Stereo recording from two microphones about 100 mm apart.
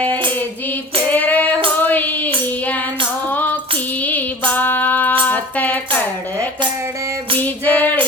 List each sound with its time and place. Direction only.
1.1 s female singing: 15° left (ahead or behind)
1.8 s child singing: 15° left (ahead or behind)
4.0 s female singing: 15° left (ahead or behind)
5.2 s a sound: 15° left (ahead or behind)
7.4 s female singing: 15° left (ahead or behind)